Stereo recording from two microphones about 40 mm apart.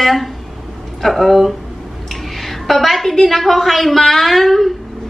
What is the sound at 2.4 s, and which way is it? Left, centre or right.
A woman's voice, centre.